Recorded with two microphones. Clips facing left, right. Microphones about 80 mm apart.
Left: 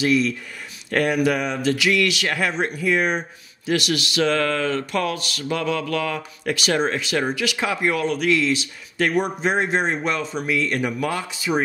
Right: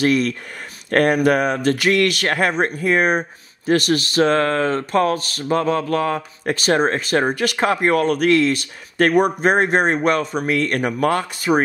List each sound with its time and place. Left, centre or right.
0.0 s speech: right